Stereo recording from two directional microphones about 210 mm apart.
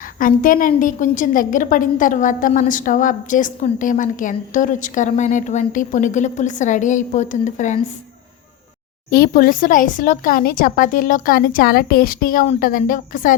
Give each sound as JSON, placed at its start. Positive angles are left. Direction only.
{"t": 0.2, "sound": "a woman's voice", "side_deg": 40}
{"t": 9.0, "sound": "a woman's voice", "side_deg": 45}